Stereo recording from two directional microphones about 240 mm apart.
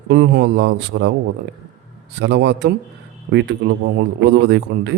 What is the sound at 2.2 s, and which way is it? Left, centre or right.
A man's voice, right.